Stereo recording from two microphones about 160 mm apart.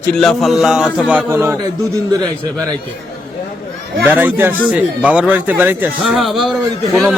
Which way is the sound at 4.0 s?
15° right (ahead or behind).